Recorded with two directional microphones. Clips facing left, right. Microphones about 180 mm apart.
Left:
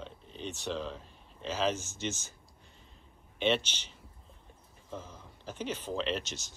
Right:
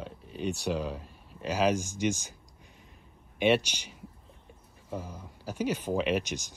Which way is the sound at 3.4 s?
10° right (ahead or behind).